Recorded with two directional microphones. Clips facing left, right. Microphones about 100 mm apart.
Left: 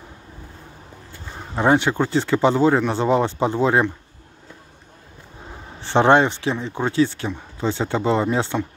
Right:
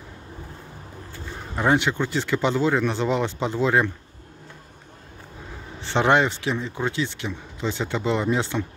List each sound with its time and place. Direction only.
1.3 s speech: 25° left (ahead or behind)
5.8 s speech: 30° left (ahead or behind)